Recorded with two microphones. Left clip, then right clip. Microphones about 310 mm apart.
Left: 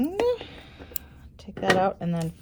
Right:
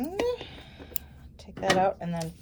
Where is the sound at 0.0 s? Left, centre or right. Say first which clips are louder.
Left 5 dB; left.